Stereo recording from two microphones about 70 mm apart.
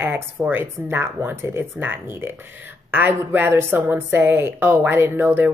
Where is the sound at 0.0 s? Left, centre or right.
Right.